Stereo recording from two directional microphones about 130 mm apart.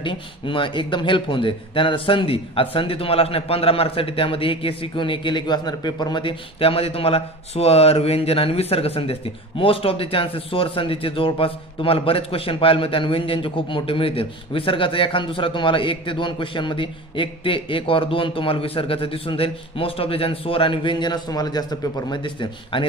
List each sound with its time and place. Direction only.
0.0 s a man's voice: 40° left (ahead or behind)